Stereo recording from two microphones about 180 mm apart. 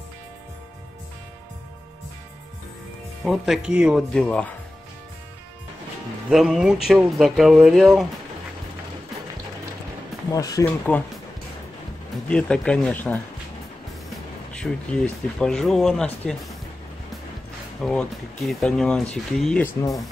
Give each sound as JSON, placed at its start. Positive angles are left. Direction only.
{"t": 3.3, "sound": "speech", "side_deg": 0}
{"t": 4.2, "sound": "speech", "side_deg": 5}
{"t": 6.2, "sound": "speech", "side_deg": -5}
{"t": 10.3, "sound": "speech", "side_deg": 20}
{"t": 12.3, "sound": "speech", "side_deg": 5}
{"t": 14.6, "sound": "speech", "side_deg": 5}
{"t": 17.8, "sound": "speech", "side_deg": 5}